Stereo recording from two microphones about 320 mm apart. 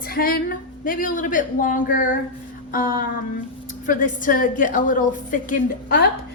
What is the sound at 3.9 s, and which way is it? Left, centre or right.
A woman's voice, left.